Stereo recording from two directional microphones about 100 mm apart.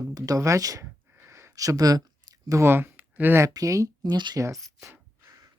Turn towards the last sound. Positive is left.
turn(degrees=-30)  # may be behind; listen again after turning